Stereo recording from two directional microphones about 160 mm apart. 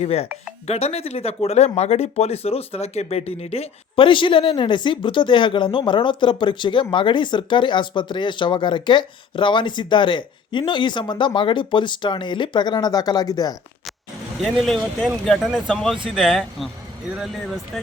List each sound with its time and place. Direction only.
0.0 s speech: 40° left (ahead or behind); by 13.6 s 25° left (ahead or behind)
14.4 s speech: centre (ahead or behind)